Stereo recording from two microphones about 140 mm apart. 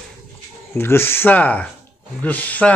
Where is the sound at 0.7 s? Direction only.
15° left (ahead or behind).